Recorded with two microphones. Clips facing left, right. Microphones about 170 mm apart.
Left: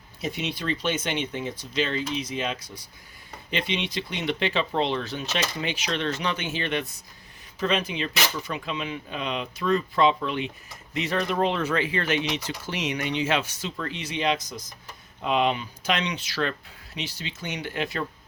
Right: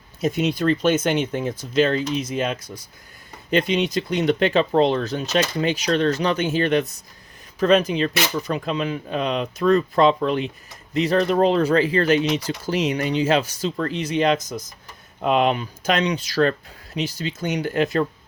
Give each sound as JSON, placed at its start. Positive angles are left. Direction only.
{"t": 0.2, "sound": "speech", "side_deg": -45}